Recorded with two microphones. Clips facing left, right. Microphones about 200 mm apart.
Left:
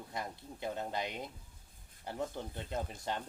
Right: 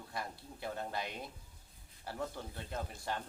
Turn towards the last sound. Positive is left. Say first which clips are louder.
# left 2 dB
turn(degrees=20)  # may be behind; listen again after turning